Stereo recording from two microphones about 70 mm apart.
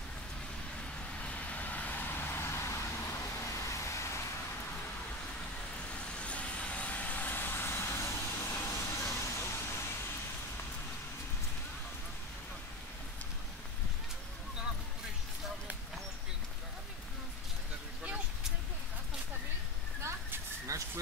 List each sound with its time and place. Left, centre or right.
0.7 s vehicle: centre; by 4.2 s left
6.1 s vehicle: centre; by 9.8 s left
20.0 s a sound: right